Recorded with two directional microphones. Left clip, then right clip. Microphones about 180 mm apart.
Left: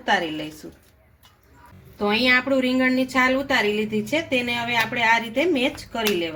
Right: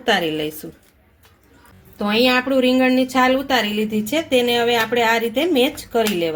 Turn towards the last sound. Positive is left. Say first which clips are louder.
# right 5 dB
turn(degrees=-45)  # may be behind; listen again after turning